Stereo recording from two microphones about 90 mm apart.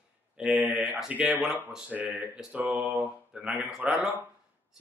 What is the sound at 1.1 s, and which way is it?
Speech, 15° right (ahead or behind).